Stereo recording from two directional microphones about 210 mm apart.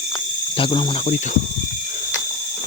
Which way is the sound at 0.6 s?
25° left (ahead or behind).